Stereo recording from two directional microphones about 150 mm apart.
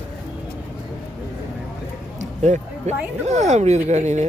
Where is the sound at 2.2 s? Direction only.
50° right (ahead or behind).